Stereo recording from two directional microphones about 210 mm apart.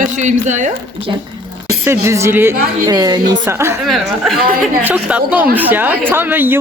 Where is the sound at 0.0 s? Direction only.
35° right (ahead or behind).